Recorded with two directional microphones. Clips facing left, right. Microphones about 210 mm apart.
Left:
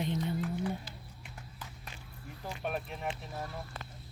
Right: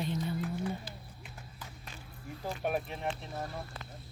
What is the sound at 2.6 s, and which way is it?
Speech, 5° right (ahead or behind).